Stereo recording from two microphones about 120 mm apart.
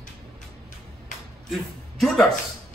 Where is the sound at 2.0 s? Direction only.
Centre (ahead or behind).